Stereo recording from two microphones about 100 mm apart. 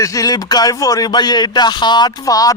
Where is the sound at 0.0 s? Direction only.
35° left (ahead or behind).